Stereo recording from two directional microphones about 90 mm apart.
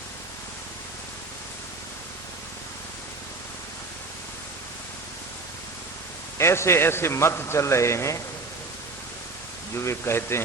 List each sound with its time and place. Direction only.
6.3 s a man's voice: 30° left (ahead or behind)
9.7 s speech: 30° left (ahead or behind)